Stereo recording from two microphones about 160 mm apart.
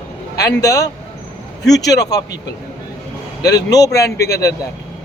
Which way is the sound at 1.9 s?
20° left (ahead or behind).